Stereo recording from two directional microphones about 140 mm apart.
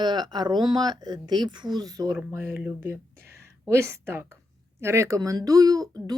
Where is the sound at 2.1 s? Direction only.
15° right (ahead or behind).